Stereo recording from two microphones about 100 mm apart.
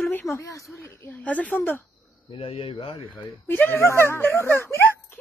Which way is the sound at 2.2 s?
65° left (ahead or behind).